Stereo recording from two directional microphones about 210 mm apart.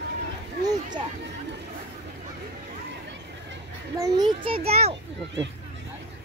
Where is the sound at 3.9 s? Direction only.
15° right (ahead or behind).